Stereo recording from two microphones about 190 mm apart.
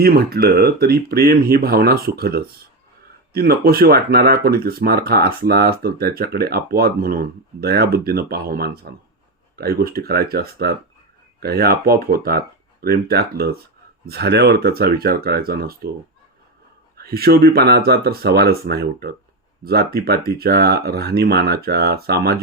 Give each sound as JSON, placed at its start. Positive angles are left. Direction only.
{"t": 0.0, "sound": "speech", "side_deg": -55}
{"t": 17.0, "sound": "speech", "side_deg": -55}